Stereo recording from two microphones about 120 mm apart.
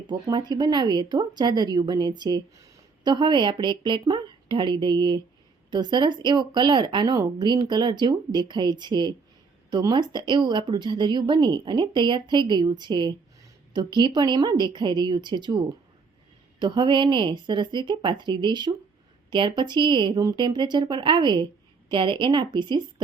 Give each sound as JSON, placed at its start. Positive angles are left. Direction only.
{"t": 0.1, "sound": "a woman's voice", "side_deg": -35}